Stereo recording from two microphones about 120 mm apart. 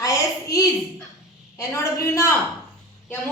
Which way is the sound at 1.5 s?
25° left (ahead or behind).